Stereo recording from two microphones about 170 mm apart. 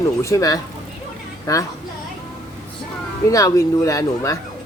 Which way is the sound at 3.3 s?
20° left (ahead or behind).